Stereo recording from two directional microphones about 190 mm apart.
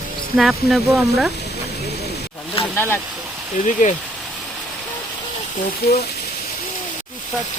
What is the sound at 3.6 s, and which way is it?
Speech, 40° left (ahead or behind).